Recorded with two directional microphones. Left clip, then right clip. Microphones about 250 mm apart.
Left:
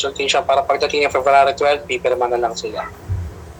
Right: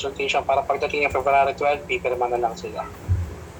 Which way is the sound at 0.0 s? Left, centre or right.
Centre.